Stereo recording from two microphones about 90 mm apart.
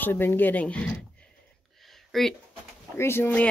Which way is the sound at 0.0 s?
25° left (ahead or behind).